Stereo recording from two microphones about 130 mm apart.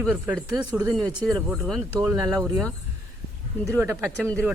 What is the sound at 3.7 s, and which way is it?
Speech, 20° right (ahead or behind).